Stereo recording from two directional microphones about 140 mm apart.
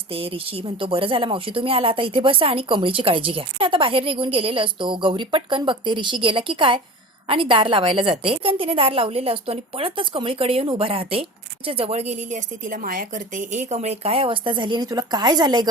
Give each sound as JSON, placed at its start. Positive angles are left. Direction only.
{"t": 0.1, "sound": "a woman's voice", "side_deg": -40}